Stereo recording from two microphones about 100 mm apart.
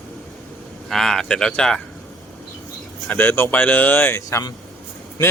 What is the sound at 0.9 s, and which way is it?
Speech, 5° left (ahead or behind).